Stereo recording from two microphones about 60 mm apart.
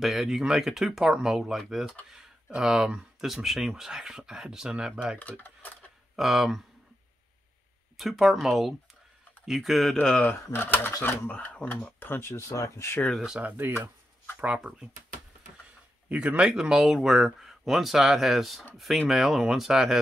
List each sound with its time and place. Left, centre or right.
0.0 s speech: centre
6.1 s speech: centre
8.0 s speech: centre
10.2 s speech: left
12.2 s speech: left
13.4 s speech: right
14.4 s speech: centre
16.1 s speech: right
16.4 s speech: centre